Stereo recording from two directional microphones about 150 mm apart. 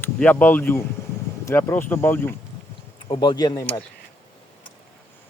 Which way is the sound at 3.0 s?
30° left (ahead or behind).